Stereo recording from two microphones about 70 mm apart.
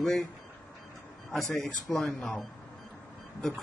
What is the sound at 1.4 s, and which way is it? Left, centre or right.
Speech, centre.